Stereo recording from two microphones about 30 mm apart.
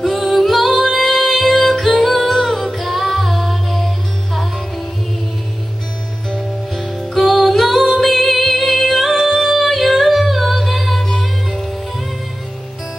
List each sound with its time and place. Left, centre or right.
0.0 s music: centre
1.9 s singing: centre
6.7 s music: centre